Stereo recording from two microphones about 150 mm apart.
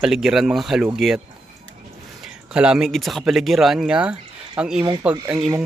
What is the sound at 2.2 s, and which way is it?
Speech, 5° right (ahead or behind).